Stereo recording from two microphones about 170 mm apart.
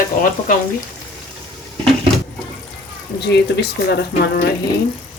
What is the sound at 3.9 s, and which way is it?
Speech, 70° left (ahead or behind).